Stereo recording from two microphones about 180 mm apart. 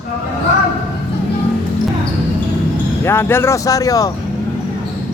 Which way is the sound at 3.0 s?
15° left (ahead or behind).